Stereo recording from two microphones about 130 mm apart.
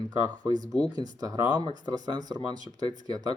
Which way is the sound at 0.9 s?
30° right (ahead or behind).